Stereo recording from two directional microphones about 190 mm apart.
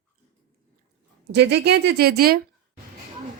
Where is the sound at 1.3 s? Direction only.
60° right (ahead or behind).